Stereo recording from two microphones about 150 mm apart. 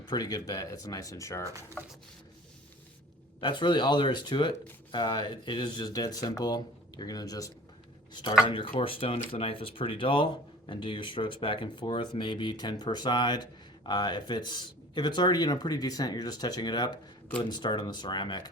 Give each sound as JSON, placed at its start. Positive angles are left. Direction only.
{"t": 0.1, "sound": "speech", "side_deg": 25}
{"t": 3.4, "sound": "speech", "side_deg": 30}